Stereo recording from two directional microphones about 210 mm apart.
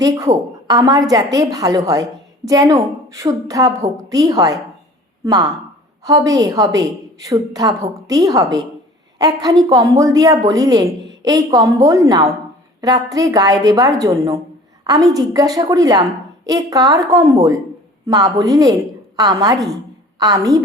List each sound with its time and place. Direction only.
0.0 s a woman's voice: 15° right (ahead or behind)